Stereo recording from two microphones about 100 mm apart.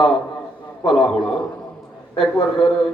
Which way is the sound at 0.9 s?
Centre (ahead or behind).